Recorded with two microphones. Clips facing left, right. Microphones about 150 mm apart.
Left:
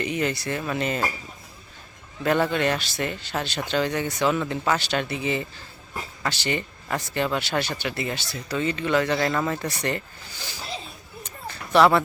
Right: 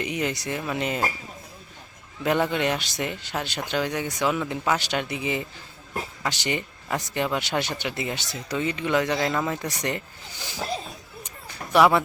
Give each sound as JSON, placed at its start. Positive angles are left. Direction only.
{"t": 0.0, "sound": "speech", "side_deg": -15}
{"t": 2.2, "sound": "speech", "side_deg": -15}
{"t": 9.1, "sound": "speech", "side_deg": -5}
{"t": 9.6, "sound": "speech", "side_deg": -15}
{"t": 11.2, "sound": "a sound", "side_deg": -15}